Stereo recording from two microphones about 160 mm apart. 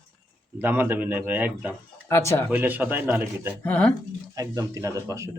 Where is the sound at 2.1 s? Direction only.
15° left (ahead or behind).